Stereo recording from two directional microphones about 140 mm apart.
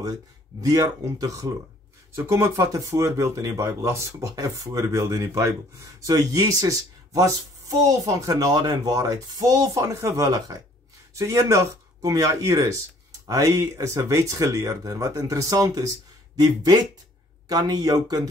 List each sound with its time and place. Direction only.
0.6 s speech: 25° right (ahead or behind)